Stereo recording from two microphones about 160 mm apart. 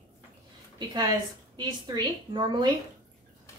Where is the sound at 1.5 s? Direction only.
25° right (ahead or behind).